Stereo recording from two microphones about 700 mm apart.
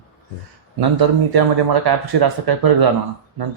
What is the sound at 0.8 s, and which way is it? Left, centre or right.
Speech, right.